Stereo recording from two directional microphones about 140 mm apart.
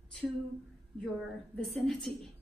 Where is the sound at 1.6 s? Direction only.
5° left (ahead or behind).